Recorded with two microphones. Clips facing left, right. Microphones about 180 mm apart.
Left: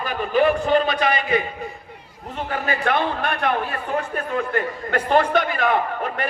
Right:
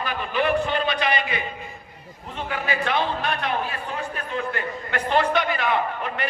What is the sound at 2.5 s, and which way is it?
A man's voice, 50° left (ahead or behind).